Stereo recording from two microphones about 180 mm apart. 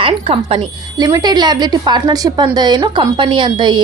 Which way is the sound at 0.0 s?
30° right (ahead or behind).